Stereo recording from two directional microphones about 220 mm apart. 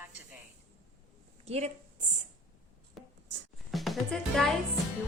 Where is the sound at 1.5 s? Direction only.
30° right (ahead or behind).